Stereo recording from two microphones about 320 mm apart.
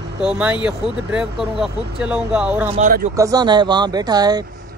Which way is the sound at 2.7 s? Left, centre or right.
Right.